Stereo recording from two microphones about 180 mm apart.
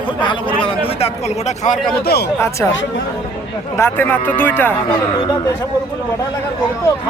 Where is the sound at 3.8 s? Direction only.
10° left (ahead or behind).